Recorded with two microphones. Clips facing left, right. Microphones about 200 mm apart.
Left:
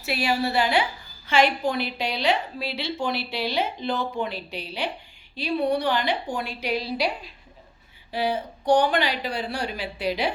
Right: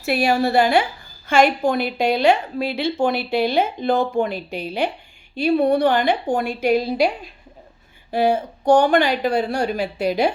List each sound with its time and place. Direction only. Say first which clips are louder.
0.0 s a woman's voice: right 6 dB; 50° right (ahead or behind)
8.1 s a woman's voice: right 7 dB; 45° right (ahead or behind)